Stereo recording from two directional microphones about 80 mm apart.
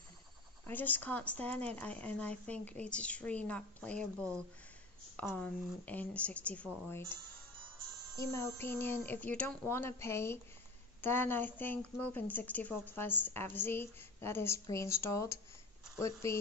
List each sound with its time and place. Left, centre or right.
0.7 s a woman's voice: left
5.3 s speech: centre
6.9 s a woman's voice: left
8.2 s a woman's voice: left; by 9.6 s centre
9.7 s a woman's voice: left